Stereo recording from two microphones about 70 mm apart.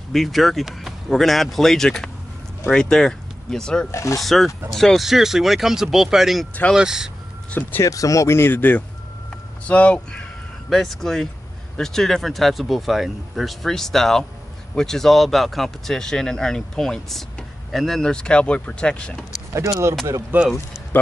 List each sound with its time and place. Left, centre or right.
0.1 s speech: centre
3.9 s speech: left
4.2 s speech: centre
7.8 s speech: left; by 10.2 s centre
10.7 s speech: centre
19.5 s speech: right
20.3 s speech: right